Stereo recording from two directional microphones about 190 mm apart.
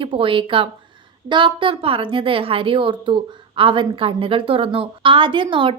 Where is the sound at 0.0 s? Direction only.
30° right (ahead or behind).